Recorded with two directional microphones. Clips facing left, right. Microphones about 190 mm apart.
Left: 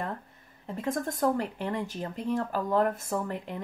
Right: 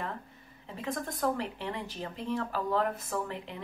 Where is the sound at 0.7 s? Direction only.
45° left (ahead or behind).